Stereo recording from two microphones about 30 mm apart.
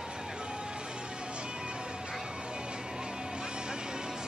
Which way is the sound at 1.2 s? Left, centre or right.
Right.